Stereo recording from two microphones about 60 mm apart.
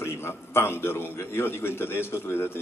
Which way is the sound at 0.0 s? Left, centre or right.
Left.